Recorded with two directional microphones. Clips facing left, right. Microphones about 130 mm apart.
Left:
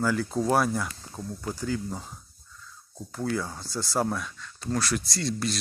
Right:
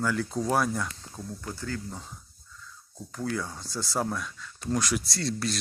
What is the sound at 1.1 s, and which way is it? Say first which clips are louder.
Speech: left 6 dB; 15° left (ahead or behind).